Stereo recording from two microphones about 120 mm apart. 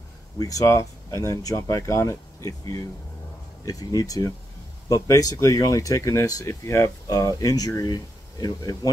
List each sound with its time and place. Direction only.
0.4 s speech: 30° left (ahead or behind)